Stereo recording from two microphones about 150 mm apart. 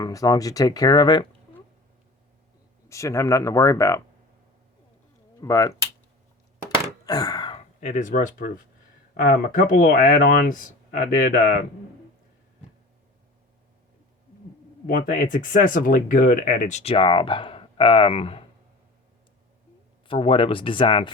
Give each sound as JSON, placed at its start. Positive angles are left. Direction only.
{"t": 0.0, "sound": "speech", "side_deg": 25}
{"t": 2.9, "sound": "speech", "side_deg": 20}
{"t": 5.4, "sound": "speech", "side_deg": 20}
{"t": 6.7, "sound": "a sound", "side_deg": -20}
{"t": 7.0, "sound": "wail", "side_deg": 25}
{"t": 7.8, "sound": "speech", "side_deg": 55}
{"t": 14.8, "sound": "speech", "side_deg": 65}
{"t": 20.1, "sound": "speech", "side_deg": 35}